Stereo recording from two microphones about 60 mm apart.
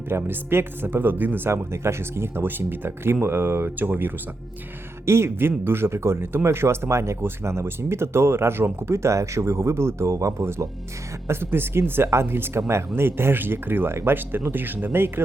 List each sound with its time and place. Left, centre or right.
0.1 s speech: right
1.5 s speech: right
5.0 s speech: right
11.3 s speech: right